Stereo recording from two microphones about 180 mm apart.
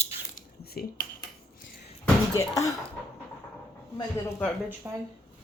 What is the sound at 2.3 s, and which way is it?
Speech, 20° left (ahead or behind).